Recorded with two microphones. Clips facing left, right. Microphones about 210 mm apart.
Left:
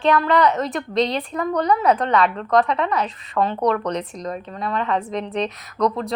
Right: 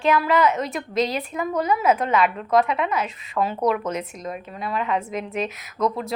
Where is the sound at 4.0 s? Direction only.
35° left (ahead or behind).